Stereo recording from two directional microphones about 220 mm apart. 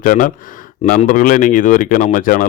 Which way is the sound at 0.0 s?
35° left (ahead or behind).